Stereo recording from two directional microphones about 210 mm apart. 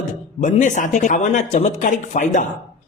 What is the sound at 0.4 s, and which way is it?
Speech, 35° left (ahead or behind).